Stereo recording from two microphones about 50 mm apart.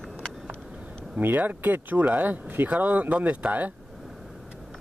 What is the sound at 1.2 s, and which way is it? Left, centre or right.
Speech, right.